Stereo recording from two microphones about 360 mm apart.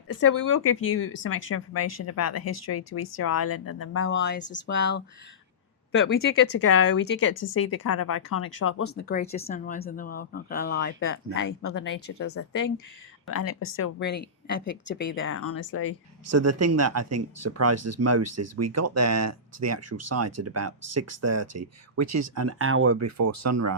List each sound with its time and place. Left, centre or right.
0.1 s speech: left
6.1 s speech: left
8.9 s speech: left
16.2 s speech: right